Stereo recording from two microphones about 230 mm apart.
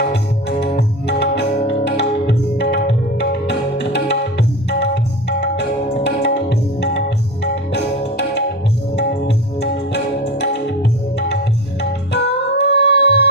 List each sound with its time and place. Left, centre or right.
0.1 s music: left
3.8 s tabla: left
6.1 s tabla: left
7.7 s music: left
11.8 s music: left